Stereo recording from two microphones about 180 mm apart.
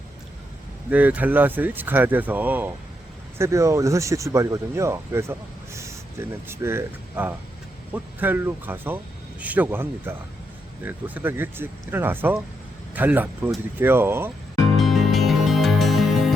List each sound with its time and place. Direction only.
0.9 s speech: 10° right (ahead or behind)
14.8 s music: centre (ahead or behind)